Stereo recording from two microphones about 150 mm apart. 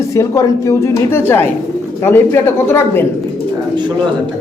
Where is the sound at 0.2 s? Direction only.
20° left (ahead or behind).